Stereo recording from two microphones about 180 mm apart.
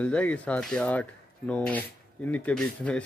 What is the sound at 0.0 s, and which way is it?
Speech, 5° left (ahead or behind).